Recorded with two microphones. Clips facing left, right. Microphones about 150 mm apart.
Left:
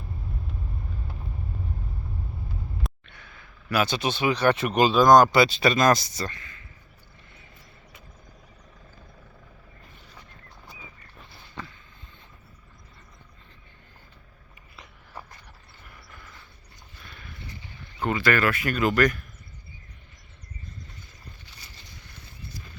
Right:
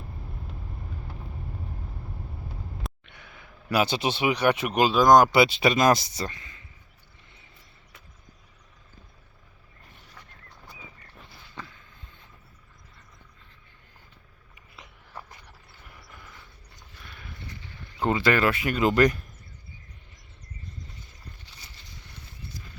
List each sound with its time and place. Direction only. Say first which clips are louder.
3.1 s a sound: right 1 dB; 20° right (ahead or behind)
3.8 s speech: even; 30° right (ahead or behind)
15.9 s vehicle: even; 15° right (ahead or behind)
18.0 s speech: right 1 dB; 25° right (ahead or behind)